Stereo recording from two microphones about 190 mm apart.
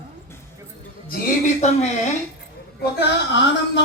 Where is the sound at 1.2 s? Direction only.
35° left (ahead or behind).